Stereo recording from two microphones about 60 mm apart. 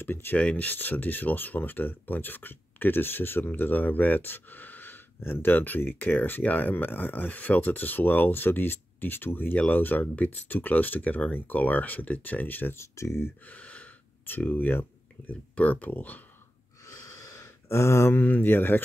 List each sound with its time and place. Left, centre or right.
0.0 s speech: left
0.4 s speech: left
12.7 s speech: left
13.5 s gasp: left
14.2 s speech: left
16.8 s a sound: left
18.1 s speech: left